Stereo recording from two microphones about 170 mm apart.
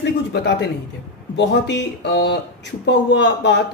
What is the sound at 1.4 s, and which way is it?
Speech, 90° left.